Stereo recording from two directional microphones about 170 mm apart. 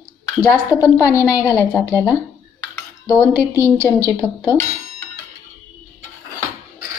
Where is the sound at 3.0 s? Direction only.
15° left (ahead or behind).